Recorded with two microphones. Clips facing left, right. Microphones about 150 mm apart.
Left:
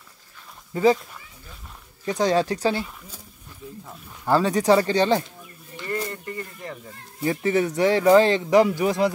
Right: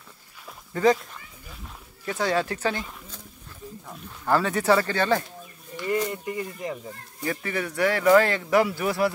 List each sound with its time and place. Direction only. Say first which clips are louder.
2.0 s speech: left 4 dB; 20° left (ahead or behind)
4.3 s speech: left 3 dB; 15° left (ahead or behind)
5.9 s speech: right 3 dB; 10° right (ahead or behind)
7.2 s speech: left 7 dB; 25° left (ahead or behind)